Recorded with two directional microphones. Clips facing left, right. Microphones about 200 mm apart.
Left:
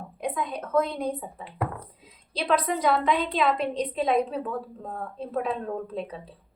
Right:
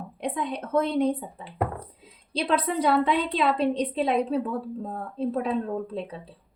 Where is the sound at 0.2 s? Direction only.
30° right (ahead or behind).